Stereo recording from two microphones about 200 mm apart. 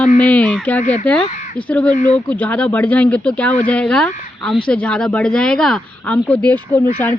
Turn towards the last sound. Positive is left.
turn(degrees=10)  # may be behind; listen again after turning